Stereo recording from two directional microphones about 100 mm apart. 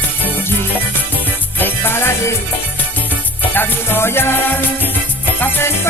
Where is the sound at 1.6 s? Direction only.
20° left (ahead or behind).